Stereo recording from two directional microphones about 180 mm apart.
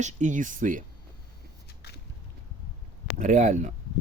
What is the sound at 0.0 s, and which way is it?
Speech, 45° right (ahead or behind).